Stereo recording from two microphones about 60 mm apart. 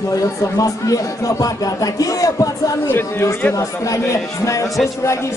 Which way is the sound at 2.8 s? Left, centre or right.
Left.